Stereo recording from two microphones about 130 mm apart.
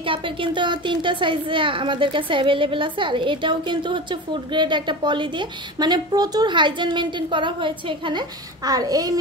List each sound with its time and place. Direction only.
0.0 s speech: 40° right (ahead or behind)